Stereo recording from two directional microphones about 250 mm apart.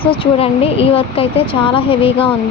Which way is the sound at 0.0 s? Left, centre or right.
Left.